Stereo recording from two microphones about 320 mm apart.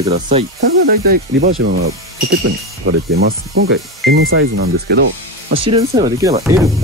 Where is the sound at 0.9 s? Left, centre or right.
Right.